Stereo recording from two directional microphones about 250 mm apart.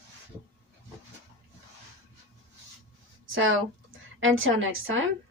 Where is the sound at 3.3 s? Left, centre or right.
Right.